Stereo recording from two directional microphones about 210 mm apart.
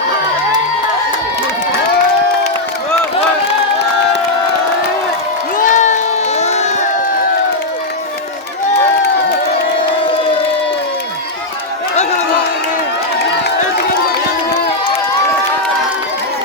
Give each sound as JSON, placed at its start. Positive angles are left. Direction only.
{"t": 5.5, "sound": "crowd", "side_deg": 35}